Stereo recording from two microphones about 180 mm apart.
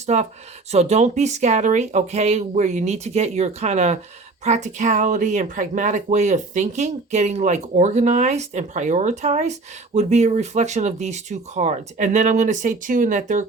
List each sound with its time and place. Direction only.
0.0 s speech: 40° right (ahead or behind)